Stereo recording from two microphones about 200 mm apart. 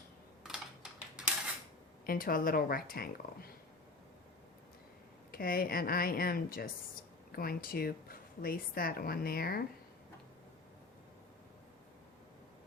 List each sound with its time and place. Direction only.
1.2 s cutlery: 5° right (ahead or behind)
2.0 s a woman's voice: 45° left (ahead or behind)
5.3 s a woman's voice: 45° left (ahead or behind)